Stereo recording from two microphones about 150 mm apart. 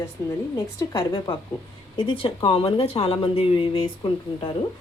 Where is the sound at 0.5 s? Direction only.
25° left (ahead or behind).